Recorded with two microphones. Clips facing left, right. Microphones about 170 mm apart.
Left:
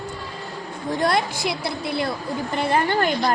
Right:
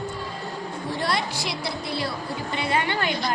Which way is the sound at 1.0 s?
50° left (ahead or behind).